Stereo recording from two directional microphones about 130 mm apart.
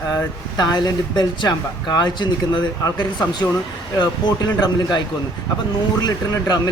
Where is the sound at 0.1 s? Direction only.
30° left (ahead or behind).